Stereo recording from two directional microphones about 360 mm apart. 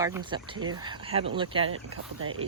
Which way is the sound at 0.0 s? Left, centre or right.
Centre.